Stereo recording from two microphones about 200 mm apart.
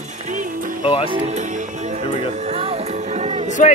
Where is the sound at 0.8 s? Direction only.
25° left (ahead or behind).